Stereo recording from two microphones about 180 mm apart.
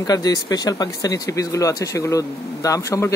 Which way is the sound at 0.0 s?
20° left (ahead or behind).